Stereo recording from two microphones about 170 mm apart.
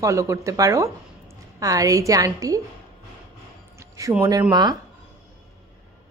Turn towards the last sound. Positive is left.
turn(degrees=-25)  # may be behind; listen again after turning